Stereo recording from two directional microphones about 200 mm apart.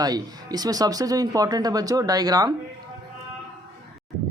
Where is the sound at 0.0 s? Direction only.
20° right (ahead or behind).